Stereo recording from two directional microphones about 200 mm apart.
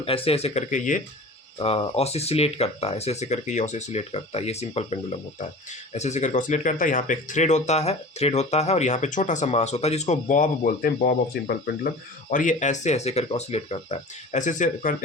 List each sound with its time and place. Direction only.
0.0 s speech: 30° left (ahead or behind)
1.5 s speech: 25° left (ahead or behind)